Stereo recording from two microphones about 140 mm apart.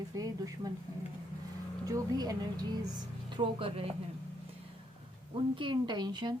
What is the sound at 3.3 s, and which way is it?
Speech, 35° right (ahead or behind).